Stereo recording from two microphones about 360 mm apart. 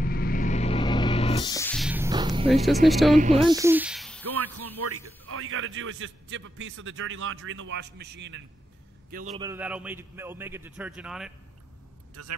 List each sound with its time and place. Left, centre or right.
0.0 s music: left; by 2.5 s centre
2.5 s a man's voice: centre
3.2 s speech: centre
4.8 s a man's voice: right
9.4 s a man's voice: centre
12.2 s a man's voice: right